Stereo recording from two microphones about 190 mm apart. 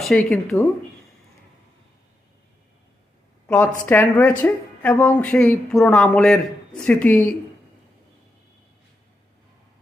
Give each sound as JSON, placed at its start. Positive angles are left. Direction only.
{"t": 0.0, "sound": "a woman's voice", "side_deg": 5}
{"t": 3.4, "sound": "a woman's voice", "side_deg": 10}